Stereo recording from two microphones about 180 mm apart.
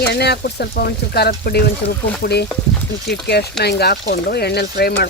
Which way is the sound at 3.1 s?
65° left (ahead or behind).